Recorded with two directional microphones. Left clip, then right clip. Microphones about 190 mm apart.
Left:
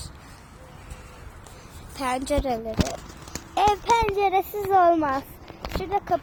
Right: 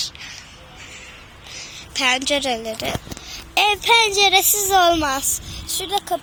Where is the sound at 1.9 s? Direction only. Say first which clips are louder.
Right 7 dB; 5° left (ahead or behind).